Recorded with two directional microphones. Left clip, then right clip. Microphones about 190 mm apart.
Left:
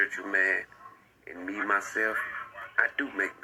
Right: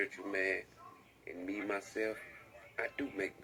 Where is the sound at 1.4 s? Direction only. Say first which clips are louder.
Left 9 dB; 10° right (ahead or behind).